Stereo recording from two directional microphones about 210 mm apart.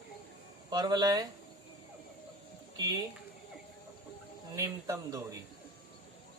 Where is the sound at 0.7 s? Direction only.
20° right (ahead or behind).